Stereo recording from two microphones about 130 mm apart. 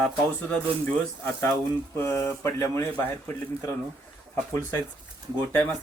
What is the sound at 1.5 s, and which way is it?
Speech, 20° left (ahead or behind).